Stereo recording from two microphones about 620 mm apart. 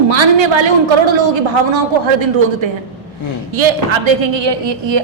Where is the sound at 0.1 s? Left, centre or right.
Right.